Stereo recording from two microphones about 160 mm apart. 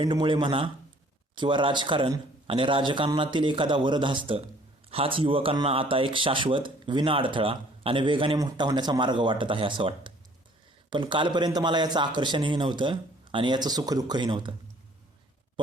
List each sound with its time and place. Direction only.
0.0 s a man's voice: 30° right (ahead or behind)